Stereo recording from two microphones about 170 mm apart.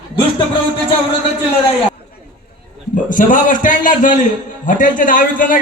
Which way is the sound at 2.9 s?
50° left (ahead or behind).